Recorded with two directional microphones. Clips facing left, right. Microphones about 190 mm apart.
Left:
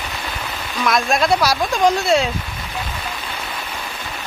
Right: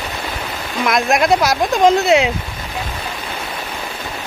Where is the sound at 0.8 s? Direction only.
20° right (ahead or behind).